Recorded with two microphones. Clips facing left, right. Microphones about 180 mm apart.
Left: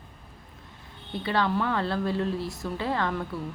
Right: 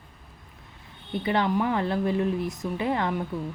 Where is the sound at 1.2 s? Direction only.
20° right (ahead or behind).